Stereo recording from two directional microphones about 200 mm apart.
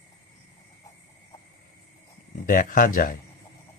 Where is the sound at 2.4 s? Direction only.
40° left (ahead or behind).